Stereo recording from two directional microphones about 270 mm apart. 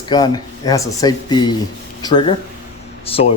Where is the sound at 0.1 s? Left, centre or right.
Centre.